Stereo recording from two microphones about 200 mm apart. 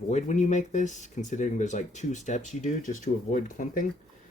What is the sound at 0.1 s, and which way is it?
Speech, 35° left (ahead or behind).